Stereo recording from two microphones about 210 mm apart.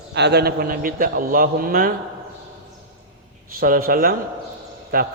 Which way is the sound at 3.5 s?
45° right (ahead or behind).